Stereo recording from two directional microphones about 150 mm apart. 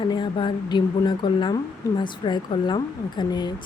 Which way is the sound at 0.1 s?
30° left (ahead or behind).